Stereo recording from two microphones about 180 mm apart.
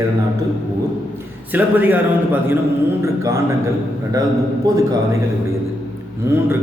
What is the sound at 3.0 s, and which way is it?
Speech, 15° right (ahead or behind).